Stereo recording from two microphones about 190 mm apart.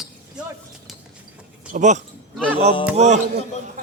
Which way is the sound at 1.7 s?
40° right (ahead or behind).